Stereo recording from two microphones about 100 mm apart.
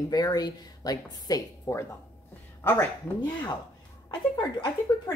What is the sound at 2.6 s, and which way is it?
Speech, 20° left (ahead or behind).